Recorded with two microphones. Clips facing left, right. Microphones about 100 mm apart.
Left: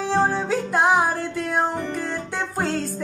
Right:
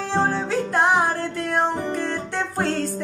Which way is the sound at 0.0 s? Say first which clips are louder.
Left 1 dB; 10° left (ahead or behind).